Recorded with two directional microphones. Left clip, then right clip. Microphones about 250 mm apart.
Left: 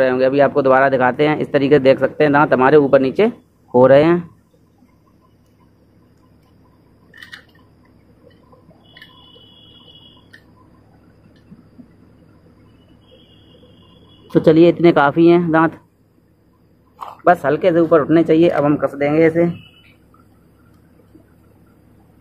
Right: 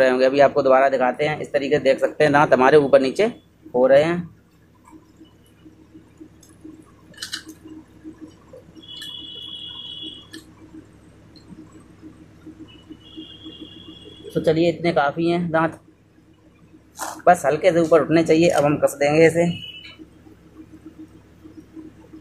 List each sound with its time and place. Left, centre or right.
0.0 s speech: centre
14.3 s speech: left
17.2 s speech: centre